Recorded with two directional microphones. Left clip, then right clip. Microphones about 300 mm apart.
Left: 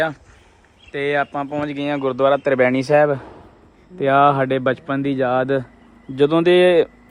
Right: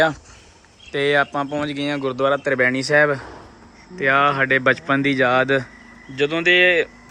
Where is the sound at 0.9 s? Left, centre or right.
Centre.